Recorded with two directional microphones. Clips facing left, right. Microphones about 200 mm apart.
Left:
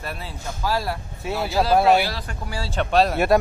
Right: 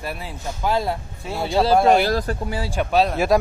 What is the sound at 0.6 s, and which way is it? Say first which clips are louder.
Speech: right 3 dB; 20° right (ahead or behind).